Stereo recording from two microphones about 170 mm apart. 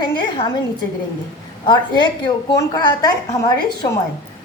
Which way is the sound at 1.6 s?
25° left (ahead or behind).